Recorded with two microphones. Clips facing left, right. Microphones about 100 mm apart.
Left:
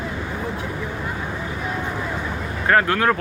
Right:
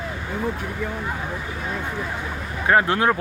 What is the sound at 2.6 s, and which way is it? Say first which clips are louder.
Speech: even; 20° right (ahead or behind).